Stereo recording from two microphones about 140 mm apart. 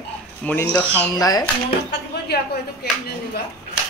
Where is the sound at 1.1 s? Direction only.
25° left (ahead or behind).